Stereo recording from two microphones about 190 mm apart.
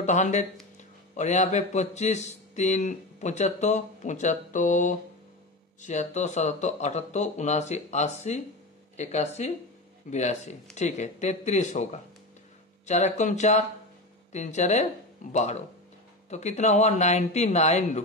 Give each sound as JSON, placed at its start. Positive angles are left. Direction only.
{"t": 0.0, "sound": "a man's voice", "side_deg": 40}